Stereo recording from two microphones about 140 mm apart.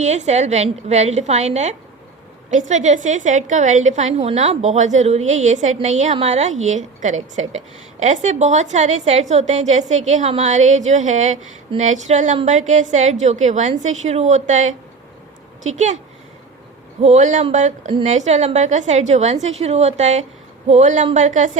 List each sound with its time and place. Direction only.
0.0 s a woman's voice: 55° right (ahead or behind)
17.0 s a woman's voice: 60° right (ahead or behind)